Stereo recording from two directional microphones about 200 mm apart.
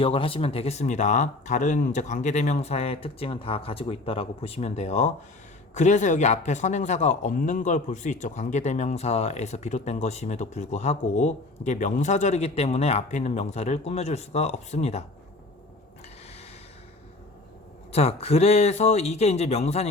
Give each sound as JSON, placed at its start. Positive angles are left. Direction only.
{"t": 0.0, "sound": "a man's voice", "side_deg": 25}
{"t": 17.9, "sound": "a man's voice", "side_deg": 30}